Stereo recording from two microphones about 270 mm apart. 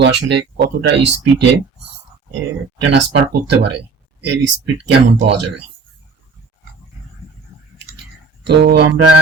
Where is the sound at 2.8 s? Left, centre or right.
Right.